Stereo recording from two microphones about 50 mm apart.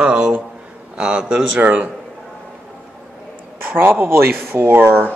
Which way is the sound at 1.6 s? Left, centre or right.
Right.